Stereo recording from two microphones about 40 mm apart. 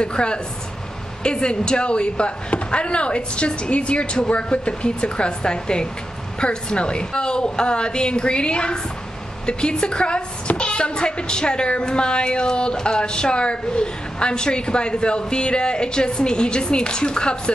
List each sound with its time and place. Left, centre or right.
0.0 s a woman's voice: left